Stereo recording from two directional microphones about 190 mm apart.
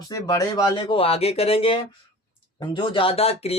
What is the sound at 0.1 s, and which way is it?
Speech, 15° left (ahead or behind).